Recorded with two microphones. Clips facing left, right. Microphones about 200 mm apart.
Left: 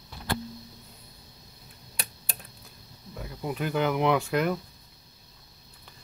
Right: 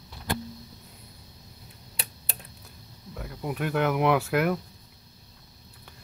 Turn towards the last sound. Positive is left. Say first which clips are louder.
# right 1 dB
turn(degrees=-5)  # may be behind; listen again after turning